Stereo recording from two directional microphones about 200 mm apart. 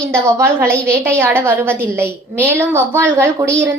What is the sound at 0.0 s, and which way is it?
A woman's voice, 15° right (ahead or behind).